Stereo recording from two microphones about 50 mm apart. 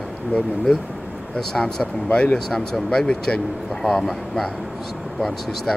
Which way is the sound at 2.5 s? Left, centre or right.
Centre.